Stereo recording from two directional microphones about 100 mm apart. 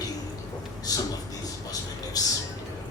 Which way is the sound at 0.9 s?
35° left (ahead or behind).